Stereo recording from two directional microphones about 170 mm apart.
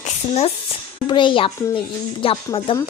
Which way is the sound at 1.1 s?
30° left (ahead or behind).